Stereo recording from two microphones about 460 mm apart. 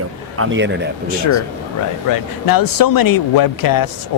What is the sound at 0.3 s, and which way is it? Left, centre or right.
Speech, right.